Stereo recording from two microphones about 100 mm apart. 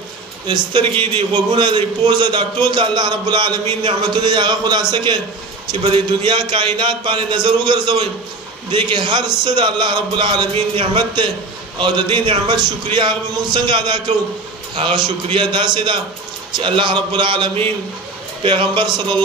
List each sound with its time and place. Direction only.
0.5 s a man's voice: 50° right (ahead or behind)